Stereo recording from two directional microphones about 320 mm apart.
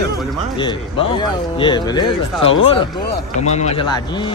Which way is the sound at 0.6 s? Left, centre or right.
Centre.